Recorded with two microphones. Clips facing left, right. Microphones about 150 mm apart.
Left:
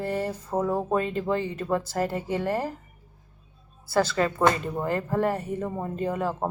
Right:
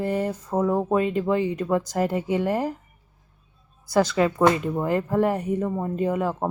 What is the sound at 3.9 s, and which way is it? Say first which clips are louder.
Speech: right 3 dB; 15° right (ahead or behind).